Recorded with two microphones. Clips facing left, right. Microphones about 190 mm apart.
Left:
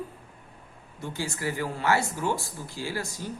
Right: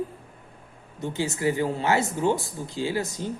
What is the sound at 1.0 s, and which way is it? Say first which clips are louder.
Speech: right 6 dB; 20° right (ahead or behind).